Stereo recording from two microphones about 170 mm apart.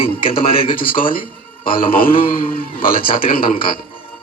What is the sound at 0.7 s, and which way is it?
A man's voice, 55° left (ahead or behind).